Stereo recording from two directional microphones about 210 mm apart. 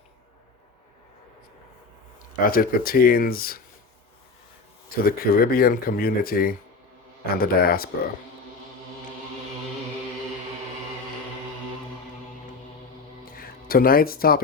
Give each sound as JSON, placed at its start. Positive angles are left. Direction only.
{"t": 2.4, "sound": "speech", "side_deg": 45}
{"t": 5.0, "sound": "speech", "side_deg": 45}
{"t": 13.2, "sound": "music", "side_deg": 45}